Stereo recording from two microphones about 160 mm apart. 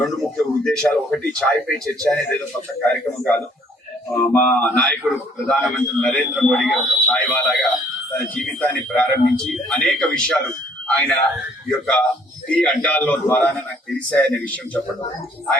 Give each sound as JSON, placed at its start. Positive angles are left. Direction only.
{"t": 0.0, "sound": "a man's voice", "side_deg": 0}
{"t": 4.1, "sound": "a man's voice", "side_deg": 10}